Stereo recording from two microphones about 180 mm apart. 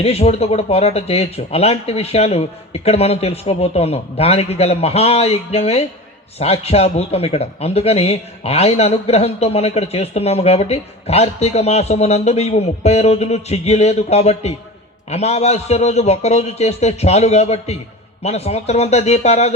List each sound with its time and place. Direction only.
0.0 s speech: 35° left (ahead or behind)